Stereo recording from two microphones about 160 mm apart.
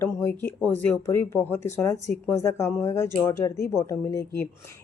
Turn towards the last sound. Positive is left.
turn(degrees=20)  # may be behind; listen again after turning